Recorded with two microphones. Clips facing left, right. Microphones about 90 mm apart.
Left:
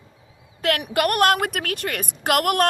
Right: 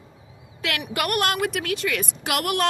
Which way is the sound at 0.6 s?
45° left (ahead or behind).